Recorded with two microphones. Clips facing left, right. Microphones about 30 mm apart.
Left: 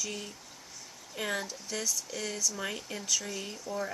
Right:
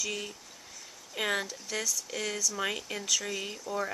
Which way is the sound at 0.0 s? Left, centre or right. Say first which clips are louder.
Right 3 dB; right.